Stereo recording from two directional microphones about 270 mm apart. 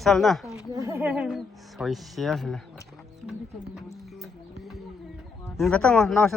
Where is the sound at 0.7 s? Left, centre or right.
Centre.